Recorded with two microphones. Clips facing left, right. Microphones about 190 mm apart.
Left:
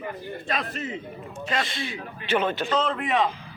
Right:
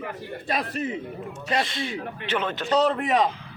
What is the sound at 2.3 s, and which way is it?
Speech, 10° left (ahead or behind).